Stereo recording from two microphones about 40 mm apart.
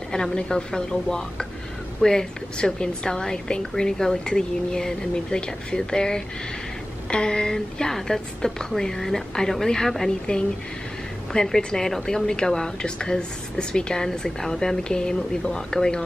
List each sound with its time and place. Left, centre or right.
0.1 s a woman's voice: centre
11.3 s speech: centre